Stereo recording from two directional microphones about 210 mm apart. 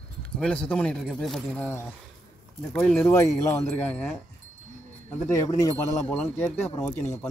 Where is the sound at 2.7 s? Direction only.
5° left (ahead or behind).